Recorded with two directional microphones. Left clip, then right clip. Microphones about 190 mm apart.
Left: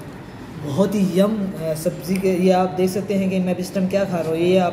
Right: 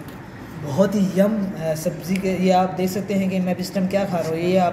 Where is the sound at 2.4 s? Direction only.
30° left (ahead or behind).